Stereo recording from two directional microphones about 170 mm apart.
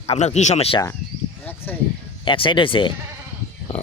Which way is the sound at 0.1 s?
40° left (ahead or behind).